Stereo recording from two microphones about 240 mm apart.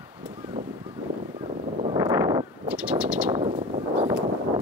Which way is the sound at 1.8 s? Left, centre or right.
Centre.